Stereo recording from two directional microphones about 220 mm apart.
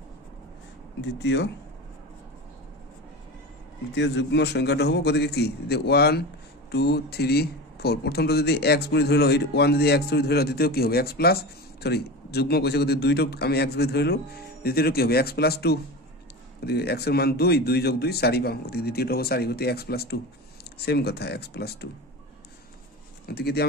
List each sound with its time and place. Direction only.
1.1 s speech: 50° left (ahead or behind)
3.9 s speech: 50° left (ahead or behind)
23.2 s speech: 45° left (ahead or behind)